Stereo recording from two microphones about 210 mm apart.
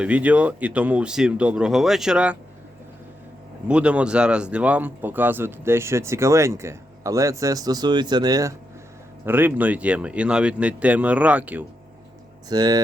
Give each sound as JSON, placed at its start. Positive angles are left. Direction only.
{"t": 0.0, "sound": "speech", "side_deg": -5}
{"t": 3.7, "sound": "speech", "side_deg": -5}
{"t": 12.5, "sound": "speech", "side_deg": -20}